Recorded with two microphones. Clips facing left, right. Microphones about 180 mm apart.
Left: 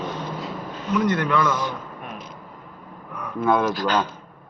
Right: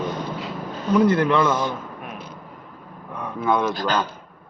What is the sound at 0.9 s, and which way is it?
Speech, 30° right (ahead or behind).